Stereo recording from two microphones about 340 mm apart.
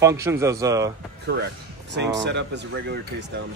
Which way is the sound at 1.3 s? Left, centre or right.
Right.